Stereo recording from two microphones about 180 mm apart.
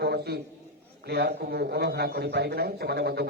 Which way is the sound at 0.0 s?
65° right (ahead or behind).